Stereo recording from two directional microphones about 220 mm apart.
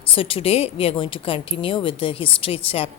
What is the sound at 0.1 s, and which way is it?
A woman's voice, 25° left (ahead or behind).